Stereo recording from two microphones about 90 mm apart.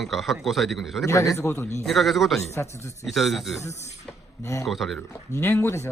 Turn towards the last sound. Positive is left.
turn(degrees=25)  # may be behind; listen again after turning